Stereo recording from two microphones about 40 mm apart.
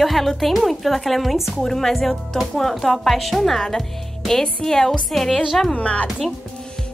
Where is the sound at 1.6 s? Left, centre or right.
Centre.